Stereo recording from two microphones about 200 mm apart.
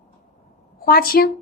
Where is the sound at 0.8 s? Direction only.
50° left (ahead or behind).